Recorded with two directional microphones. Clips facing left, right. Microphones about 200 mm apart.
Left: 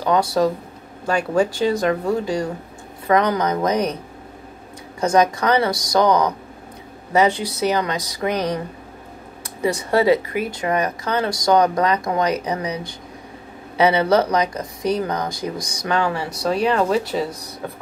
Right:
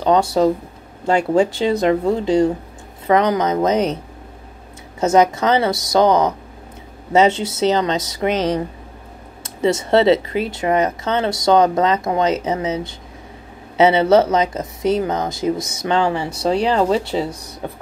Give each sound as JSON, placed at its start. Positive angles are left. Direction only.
{"t": 0.0, "sound": "speech", "side_deg": -20}
{"t": 5.0, "sound": "speech", "side_deg": -25}